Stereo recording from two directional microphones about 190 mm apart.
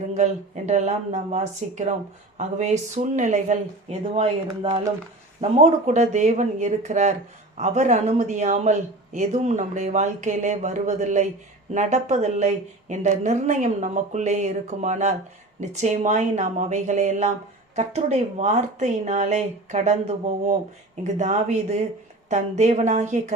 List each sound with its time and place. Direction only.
0.1 s speech: 35° right (ahead or behind)